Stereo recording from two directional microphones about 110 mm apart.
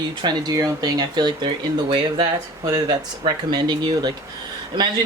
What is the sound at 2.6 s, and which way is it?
Speech, 35° right (ahead or behind).